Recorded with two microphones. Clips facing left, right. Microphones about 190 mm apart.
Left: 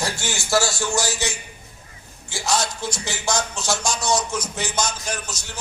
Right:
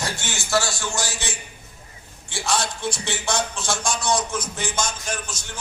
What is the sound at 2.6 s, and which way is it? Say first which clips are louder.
A man's voice: even; 55° right (ahead or behind).